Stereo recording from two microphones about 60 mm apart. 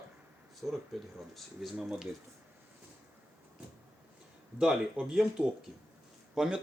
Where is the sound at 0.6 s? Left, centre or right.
Centre.